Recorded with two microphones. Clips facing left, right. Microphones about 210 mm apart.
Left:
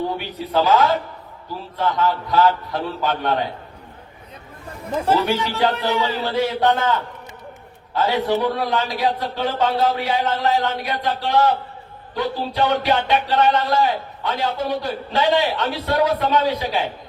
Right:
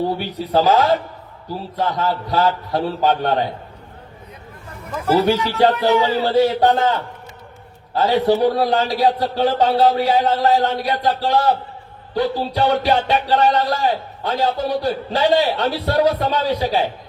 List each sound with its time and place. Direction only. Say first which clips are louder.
0.2 s speech: right 3 dB; 35° right (ahead or behind)
4.8 s speech: left 1 dB; 30° left (ahead or behind)
5.1 s speech: right 6 dB; 30° right (ahead or behind)